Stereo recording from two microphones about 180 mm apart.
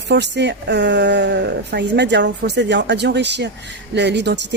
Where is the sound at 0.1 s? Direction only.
75° right (ahead or behind).